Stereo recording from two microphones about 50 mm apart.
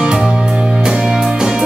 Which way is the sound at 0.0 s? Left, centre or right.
Centre.